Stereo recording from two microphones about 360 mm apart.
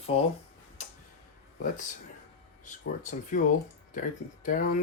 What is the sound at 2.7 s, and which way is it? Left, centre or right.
Speech, left.